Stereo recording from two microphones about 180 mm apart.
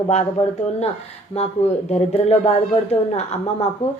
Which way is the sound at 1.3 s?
35° left (ahead or behind).